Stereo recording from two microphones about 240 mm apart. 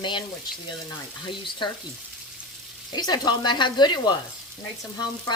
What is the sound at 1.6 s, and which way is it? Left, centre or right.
Frying, left.